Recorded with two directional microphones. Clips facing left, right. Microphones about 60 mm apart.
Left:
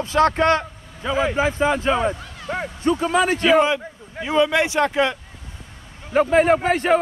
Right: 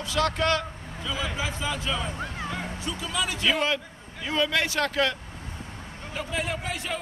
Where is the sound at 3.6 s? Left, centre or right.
Centre.